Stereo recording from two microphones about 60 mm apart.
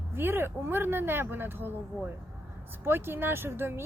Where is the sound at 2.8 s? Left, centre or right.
Right.